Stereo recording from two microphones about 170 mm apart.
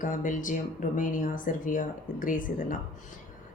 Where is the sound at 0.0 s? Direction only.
50° left (ahead or behind).